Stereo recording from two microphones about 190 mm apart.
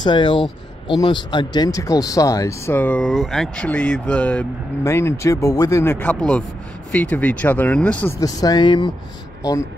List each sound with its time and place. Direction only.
0.0 s speech: 25° left (ahead or behind); by 8.1 s 5° left (ahead or behind)
8.2 s speech: 20° left (ahead or behind)